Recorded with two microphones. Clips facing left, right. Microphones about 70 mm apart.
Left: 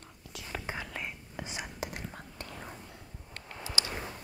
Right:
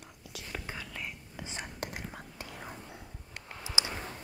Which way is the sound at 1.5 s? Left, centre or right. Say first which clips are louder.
Even; centre.